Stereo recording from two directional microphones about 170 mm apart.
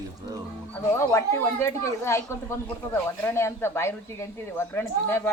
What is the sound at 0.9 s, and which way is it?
Speech, 15° left (ahead or behind).